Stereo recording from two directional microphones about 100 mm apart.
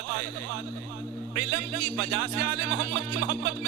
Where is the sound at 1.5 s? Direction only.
30° right (ahead or behind).